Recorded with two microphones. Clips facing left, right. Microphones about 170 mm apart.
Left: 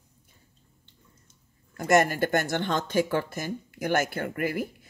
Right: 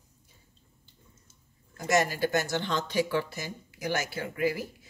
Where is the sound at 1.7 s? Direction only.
55° left (ahead or behind).